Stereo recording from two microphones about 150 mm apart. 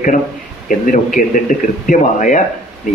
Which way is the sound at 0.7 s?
60° left (ahead or behind).